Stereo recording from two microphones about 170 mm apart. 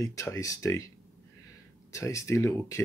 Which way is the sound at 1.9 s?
20° left (ahead or behind).